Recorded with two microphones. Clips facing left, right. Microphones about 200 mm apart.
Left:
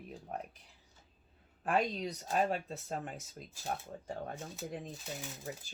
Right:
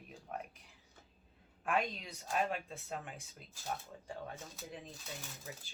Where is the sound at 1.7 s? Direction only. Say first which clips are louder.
Left 4 dB; 35° left (ahead or behind).